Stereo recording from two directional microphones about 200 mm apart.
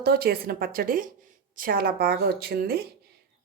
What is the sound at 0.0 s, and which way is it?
Speech, 50° right (ahead or behind).